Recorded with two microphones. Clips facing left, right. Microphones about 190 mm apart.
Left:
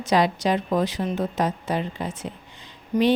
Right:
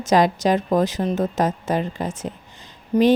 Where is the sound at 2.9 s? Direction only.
30° right (ahead or behind).